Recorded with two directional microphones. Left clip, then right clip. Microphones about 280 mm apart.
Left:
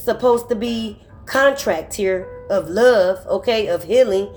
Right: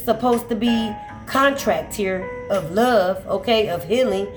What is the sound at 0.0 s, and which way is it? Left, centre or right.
Speech, left.